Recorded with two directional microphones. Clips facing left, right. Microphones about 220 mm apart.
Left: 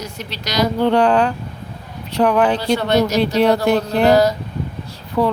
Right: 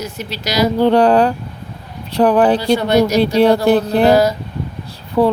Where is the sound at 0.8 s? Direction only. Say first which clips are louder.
Right 4 dB; 35° right (ahead or behind).